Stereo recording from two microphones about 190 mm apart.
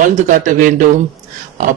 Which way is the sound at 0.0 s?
40° right (ahead or behind).